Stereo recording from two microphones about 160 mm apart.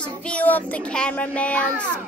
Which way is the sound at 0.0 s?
5° left (ahead or behind).